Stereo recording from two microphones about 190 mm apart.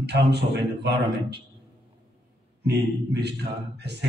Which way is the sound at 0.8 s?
60° right (ahead or behind).